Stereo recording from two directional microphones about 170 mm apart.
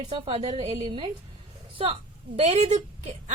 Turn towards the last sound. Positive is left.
turn(degrees=-40)  # may be behind; listen again after turning